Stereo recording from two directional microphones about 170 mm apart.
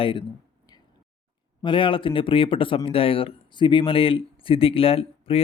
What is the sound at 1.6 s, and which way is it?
Speech, 30° left (ahead or behind).